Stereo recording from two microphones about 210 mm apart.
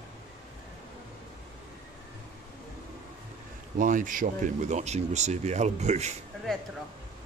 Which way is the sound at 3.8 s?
40° right (ahead or behind).